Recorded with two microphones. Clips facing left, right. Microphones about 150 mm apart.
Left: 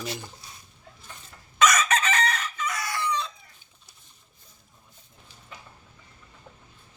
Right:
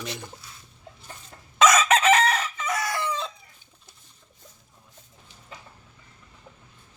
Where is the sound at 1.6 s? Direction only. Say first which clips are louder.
Right 4 dB; 90° right.